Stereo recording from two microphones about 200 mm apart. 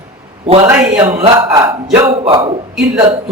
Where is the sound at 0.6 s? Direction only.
15° right (ahead or behind).